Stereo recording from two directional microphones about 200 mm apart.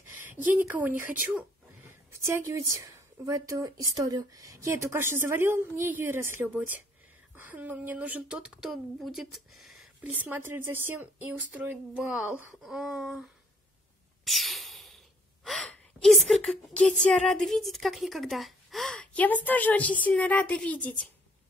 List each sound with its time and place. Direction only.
0.6 s a woman's voice: 10° right (ahead or behind)
14.2 s a sound: centre (ahead or behind)
15.4 s a woman's voice: centre (ahead or behind)